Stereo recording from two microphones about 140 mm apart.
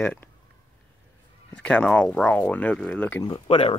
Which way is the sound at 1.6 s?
10° left (ahead or behind).